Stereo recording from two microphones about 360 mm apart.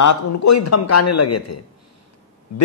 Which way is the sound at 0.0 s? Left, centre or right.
Left.